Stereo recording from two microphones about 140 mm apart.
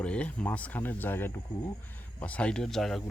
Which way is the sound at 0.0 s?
10° left (ahead or behind).